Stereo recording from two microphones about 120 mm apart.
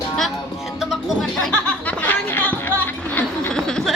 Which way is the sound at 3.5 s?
5° left (ahead or behind).